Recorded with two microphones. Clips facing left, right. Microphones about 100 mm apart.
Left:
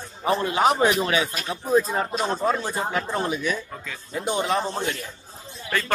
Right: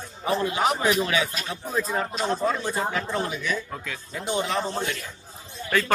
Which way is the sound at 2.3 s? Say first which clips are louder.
Even; 35° left (ahead or behind).